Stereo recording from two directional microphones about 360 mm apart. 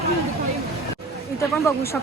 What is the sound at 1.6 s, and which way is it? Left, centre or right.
Speech, centre.